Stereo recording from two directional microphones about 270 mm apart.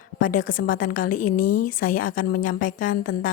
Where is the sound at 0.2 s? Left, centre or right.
Left.